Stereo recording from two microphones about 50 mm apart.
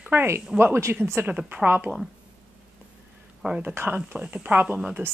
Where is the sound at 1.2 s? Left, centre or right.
Right.